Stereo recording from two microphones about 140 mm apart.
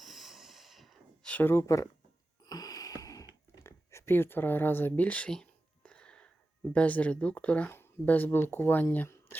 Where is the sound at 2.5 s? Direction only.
25° left (ahead or behind); by 6.2 s 5° left (ahead or behind).